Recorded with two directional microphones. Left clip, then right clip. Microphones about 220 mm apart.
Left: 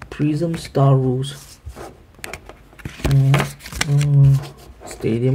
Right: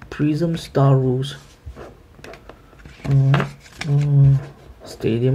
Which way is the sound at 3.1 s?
45° left (ahead or behind).